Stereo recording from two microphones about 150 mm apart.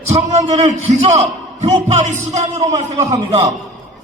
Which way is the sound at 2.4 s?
20° right (ahead or behind).